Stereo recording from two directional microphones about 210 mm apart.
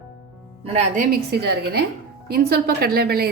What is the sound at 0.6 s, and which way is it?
Speech, 30° right (ahead or behind).